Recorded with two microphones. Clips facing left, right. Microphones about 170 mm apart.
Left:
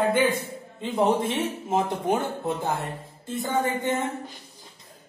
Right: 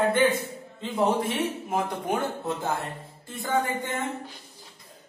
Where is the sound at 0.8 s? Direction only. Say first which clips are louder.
Left 2 dB; 20° left (ahead or behind).